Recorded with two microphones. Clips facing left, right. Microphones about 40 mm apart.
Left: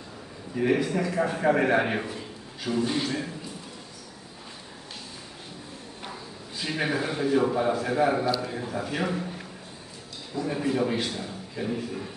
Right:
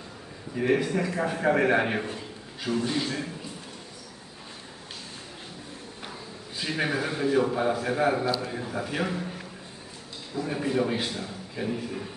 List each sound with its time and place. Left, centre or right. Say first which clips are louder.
0.6 s a man's voice: even; centre
2.7 s a man's voice: left 1 dB; left
6.6 s a man's voice: even; centre